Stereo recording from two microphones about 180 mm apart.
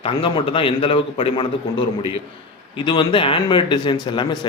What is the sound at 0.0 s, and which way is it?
Speech, 30° left (ahead or behind).